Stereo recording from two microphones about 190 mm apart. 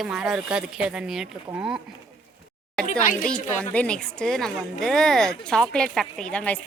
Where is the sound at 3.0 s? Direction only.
40° left (ahead or behind).